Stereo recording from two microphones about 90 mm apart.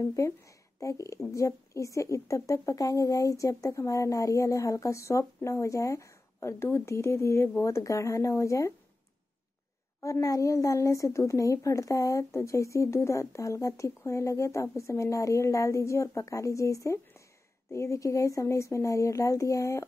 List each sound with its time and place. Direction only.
0.0 s a woman's voice: 35° left (ahead or behind)
10.0 s a woman's voice: 35° left (ahead or behind)